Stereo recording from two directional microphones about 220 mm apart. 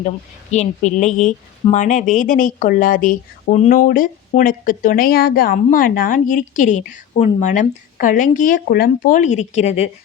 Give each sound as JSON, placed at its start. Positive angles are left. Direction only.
{"t": 0.5, "sound": "speech", "side_deg": 30}